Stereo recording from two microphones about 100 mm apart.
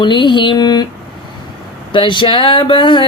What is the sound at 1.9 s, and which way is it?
Speech, 55° left (ahead or behind).